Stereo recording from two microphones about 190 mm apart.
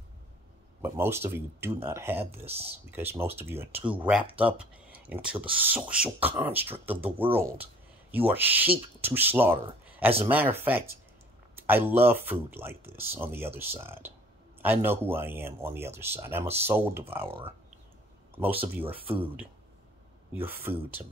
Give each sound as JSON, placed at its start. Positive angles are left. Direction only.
{"t": 0.8, "sound": "speech", "side_deg": -15}
{"t": 18.9, "sound": "speech", "side_deg": -30}
{"t": 20.3, "sound": "speech", "side_deg": -10}